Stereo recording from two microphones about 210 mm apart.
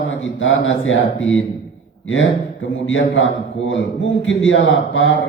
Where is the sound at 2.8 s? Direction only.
65° left (ahead or behind).